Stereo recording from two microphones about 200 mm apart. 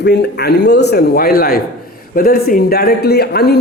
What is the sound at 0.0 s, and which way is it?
Speech, 55° left (ahead or behind).